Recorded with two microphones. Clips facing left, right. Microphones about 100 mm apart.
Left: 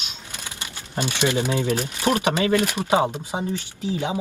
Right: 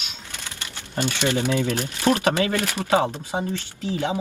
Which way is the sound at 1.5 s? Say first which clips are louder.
Even; 15° left (ahead or behind).